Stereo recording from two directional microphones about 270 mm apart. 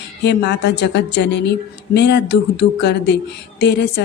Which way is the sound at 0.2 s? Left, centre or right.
Left.